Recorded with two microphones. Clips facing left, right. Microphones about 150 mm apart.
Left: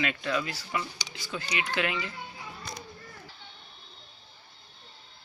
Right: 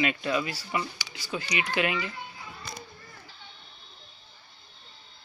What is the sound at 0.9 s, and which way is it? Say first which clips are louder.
Speech: left 1 dB; 20° left (ahead or behind).